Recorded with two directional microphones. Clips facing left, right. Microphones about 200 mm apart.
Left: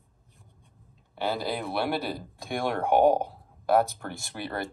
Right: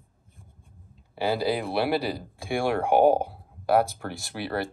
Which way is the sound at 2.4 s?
10° right (ahead or behind).